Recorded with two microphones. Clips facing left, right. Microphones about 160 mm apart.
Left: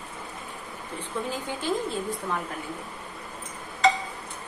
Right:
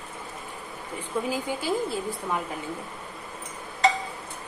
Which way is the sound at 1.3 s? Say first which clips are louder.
Even; 10° right (ahead or behind).